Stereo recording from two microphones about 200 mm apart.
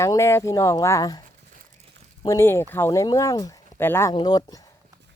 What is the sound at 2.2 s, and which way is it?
Speech, 15° left (ahead or behind).